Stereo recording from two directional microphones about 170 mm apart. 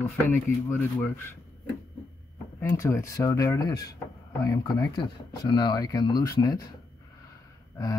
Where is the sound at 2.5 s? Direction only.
15° left (ahead or behind).